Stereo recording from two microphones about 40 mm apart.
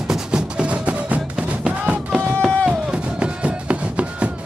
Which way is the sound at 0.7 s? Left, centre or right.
Right.